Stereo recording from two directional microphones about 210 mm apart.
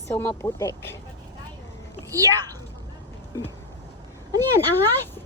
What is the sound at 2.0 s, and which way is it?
Speech, 15° right (ahead or behind).